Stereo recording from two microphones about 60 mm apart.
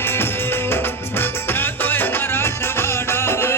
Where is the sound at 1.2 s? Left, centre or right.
Left.